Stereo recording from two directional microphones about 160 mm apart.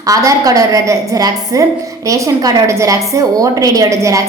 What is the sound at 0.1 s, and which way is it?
A woman's voice, 20° right (ahead or behind).